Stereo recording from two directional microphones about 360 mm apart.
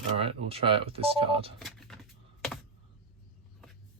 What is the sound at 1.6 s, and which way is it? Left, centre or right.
Keys jangling, centre.